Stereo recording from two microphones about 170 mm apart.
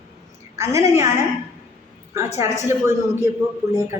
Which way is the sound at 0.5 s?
15° right (ahead or behind).